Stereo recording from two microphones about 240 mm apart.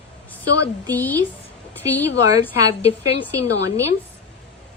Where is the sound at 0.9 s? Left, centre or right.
Centre.